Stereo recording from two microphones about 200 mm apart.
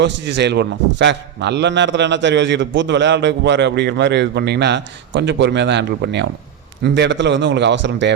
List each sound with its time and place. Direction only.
0.0 s a man's voice: 60° right (ahead or behind)